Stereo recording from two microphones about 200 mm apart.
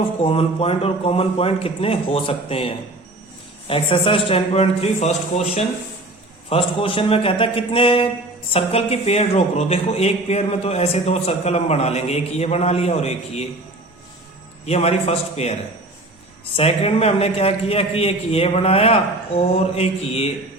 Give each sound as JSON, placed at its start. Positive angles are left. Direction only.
{"t": 0.2, "sound": "a man's voice", "side_deg": 30}
{"t": 6.5, "sound": "a man's voice", "side_deg": 30}
{"t": 14.7, "sound": "speech", "side_deg": 35}
{"t": 16.6, "sound": "speech", "side_deg": 30}